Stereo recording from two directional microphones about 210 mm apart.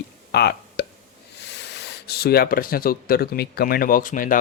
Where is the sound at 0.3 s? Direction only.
50° left (ahead or behind).